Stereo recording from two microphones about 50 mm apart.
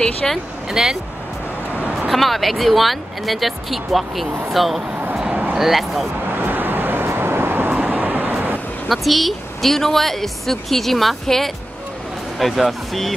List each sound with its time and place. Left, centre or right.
0.2 s speech: centre
0.7 s speech: centre
2.0 s a woman's voice: centre
5.1 s a sound: centre
5.6 s a woman's voice: centre
6.3 s vehicle: right
8.8 s a woman's voice: centre